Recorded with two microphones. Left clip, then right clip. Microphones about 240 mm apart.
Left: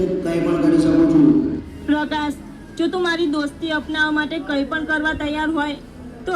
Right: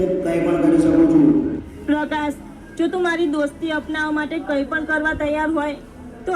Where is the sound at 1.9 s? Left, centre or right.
Centre.